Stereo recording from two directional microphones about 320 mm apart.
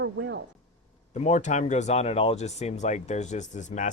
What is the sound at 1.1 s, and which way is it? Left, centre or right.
Speech, left.